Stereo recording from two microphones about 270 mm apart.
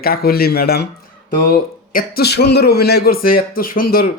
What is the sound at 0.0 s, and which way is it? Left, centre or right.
A man's voice, left.